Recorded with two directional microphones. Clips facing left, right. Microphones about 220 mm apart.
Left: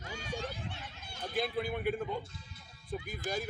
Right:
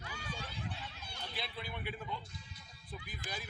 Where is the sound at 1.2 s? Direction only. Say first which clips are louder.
Left 11 dB; 50° left (ahead or behind).